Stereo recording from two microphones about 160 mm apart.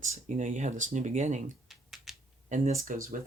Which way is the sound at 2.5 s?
55° right (ahead or behind).